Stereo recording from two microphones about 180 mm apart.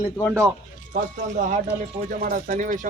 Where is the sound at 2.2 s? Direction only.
45° right (ahead or behind).